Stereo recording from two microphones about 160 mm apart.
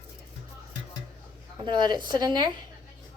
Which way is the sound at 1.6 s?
25° right (ahead or behind).